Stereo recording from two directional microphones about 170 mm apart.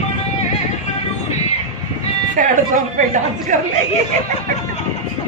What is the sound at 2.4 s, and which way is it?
Speech, 50° right (ahead or behind).